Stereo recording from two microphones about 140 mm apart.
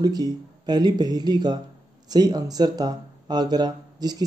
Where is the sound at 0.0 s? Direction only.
30° right (ahead or behind).